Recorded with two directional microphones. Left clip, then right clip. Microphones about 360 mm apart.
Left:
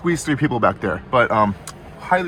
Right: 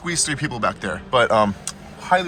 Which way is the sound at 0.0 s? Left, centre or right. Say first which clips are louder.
Left 3 dB; centre.